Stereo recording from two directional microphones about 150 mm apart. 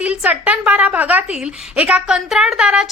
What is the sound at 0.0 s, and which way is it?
A woman's voice, 10° right (ahead or behind).